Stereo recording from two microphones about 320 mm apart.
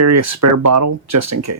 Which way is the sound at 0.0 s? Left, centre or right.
Right.